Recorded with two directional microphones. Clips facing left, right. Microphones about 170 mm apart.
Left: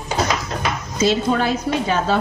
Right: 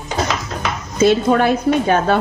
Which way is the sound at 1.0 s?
55° right (ahead or behind).